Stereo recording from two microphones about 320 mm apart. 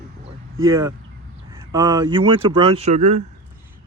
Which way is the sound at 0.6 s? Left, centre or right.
Centre.